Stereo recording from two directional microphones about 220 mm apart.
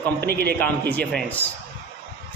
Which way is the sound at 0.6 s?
5° left (ahead or behind).